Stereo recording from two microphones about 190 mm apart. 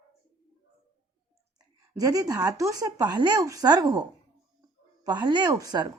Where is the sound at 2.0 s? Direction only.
20° right (ahead or behind).